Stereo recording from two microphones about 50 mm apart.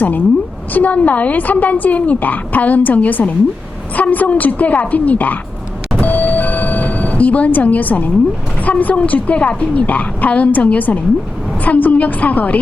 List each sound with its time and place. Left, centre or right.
0.7 s a woman's voice: left
6.0 s a sound: left
8.6 s a woman's voice: left